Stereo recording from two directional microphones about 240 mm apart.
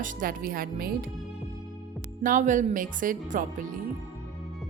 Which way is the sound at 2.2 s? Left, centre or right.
Right.